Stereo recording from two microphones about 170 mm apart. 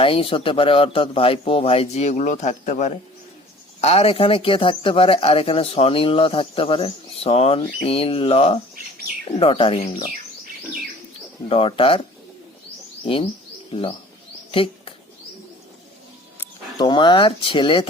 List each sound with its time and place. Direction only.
0.0 s speech: 30° left (ahead or behind)
11.4 s speech: 35° left (ahead or behind)
14.5 s a sound: 30° left (ahead or behind)
16.7 s speech: 25° left (ahead or behind)